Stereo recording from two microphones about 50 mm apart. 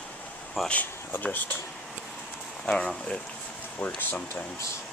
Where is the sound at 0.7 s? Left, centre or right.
Left.